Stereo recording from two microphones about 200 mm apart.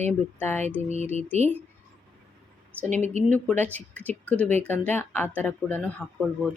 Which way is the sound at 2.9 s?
35° right (ahead or behind).